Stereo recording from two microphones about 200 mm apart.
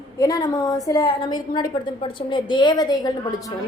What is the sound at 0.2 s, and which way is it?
A woman's voice, 20° left (ahead or behind).